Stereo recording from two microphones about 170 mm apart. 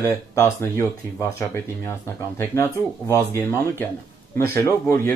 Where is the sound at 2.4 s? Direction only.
15° left (ahead or behind).